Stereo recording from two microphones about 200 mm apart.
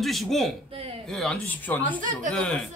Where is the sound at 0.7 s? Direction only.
30° right (ahead or behind).